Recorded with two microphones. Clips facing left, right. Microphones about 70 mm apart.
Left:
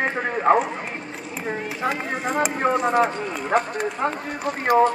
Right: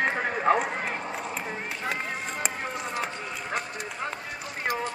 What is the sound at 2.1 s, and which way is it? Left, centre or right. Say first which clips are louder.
Speech: left 9 dB; left.